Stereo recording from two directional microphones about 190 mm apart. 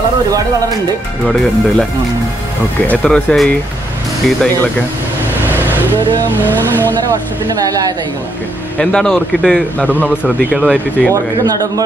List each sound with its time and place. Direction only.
2.9 s speech: 5° left (ahead or behind)
6.3 s speech: 10° left (ahead or behind)
7.6 s a woman's voice: 20° right (ahead or behind)
8.7 s speech: 5° left (ahead or behind)